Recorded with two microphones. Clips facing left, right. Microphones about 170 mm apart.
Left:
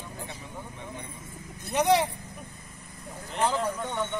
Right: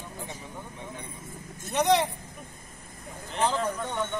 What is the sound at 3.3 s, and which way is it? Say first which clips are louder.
Speech: even; 10° left (ahead or behind).